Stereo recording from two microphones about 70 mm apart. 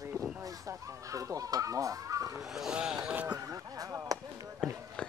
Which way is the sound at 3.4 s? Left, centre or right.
Right.